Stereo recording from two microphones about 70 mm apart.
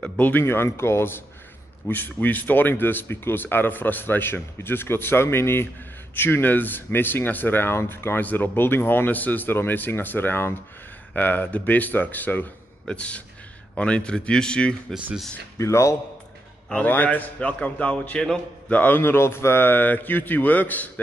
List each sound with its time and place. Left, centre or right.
0.2 s speech: left
12.8 s speech: centre
15.5 s a man's voice: left
16.7 s speech: left